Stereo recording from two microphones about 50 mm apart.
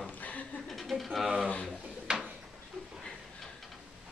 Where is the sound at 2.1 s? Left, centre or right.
Centre.